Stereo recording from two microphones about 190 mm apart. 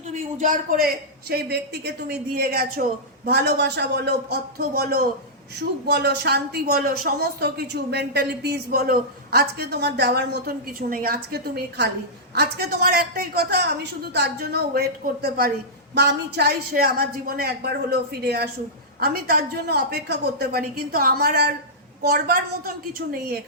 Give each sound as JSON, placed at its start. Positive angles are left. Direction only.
{"t": 0.1, "sound": "a woman's voice", "side_deg": -40}
{"t": 1.3, "sound": "a woman's voice", "side_deg": -60}